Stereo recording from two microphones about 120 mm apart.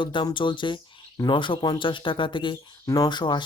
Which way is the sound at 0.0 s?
40° left (ahead or behind).